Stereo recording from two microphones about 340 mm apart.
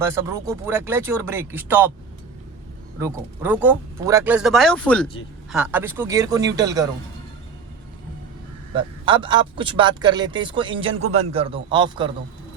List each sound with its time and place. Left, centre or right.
0.0 s a man's voice: centre
3.0 s a man's voice: centre
8.7 s a man's voice: centre